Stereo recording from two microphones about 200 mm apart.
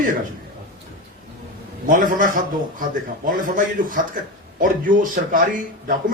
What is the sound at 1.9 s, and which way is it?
A man's voice, 40° right (ahead or behind).